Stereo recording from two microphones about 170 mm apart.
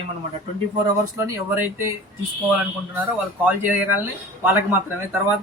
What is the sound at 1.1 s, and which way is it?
Speech, 15° right (ahead or behind).